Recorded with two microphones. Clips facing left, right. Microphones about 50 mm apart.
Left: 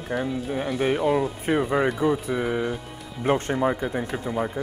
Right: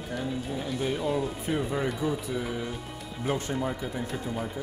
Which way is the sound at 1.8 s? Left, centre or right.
Left.